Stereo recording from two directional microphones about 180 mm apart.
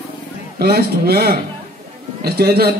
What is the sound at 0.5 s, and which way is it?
A man's voice, 60° right (ahead or behind).